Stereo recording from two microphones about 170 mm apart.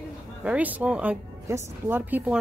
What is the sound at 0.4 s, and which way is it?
Speech, 10° right (ahead or behind).